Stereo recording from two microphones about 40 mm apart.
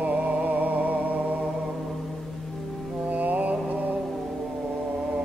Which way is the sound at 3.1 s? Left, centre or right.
Right.